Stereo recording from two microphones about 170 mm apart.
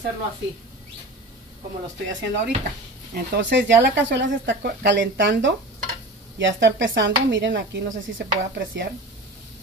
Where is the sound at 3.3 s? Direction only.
90° right.